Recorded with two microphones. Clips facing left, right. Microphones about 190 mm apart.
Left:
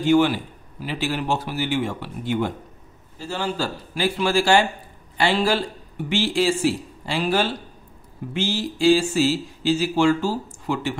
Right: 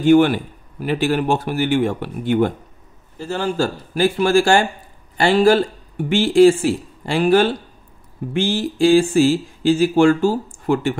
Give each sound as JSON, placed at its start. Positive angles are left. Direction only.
{"t": 0.0, "sound": "speech", "side_deg": -55}